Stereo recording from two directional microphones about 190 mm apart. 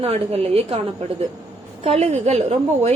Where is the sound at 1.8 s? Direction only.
30° right (ahead or behind).